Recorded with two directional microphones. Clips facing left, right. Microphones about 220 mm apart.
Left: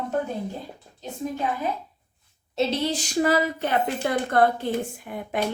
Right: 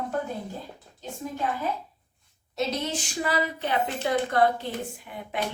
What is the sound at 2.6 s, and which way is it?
A woman's voice, 30° left (ahead or behind).